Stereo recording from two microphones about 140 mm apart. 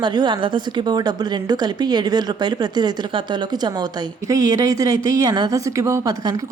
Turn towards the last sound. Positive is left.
turn(degrees=-25)  # may be behind; listen again after turning